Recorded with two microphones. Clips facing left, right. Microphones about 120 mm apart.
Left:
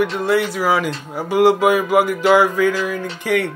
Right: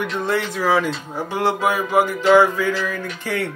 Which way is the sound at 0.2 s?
10° left (ahead or behind).